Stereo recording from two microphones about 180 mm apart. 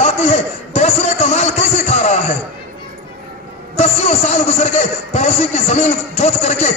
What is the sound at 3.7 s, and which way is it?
A man's voice, 40° left (ahead or behind).